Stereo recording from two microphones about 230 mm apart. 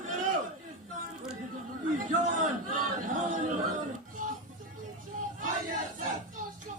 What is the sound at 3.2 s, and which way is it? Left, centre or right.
Chatter, right.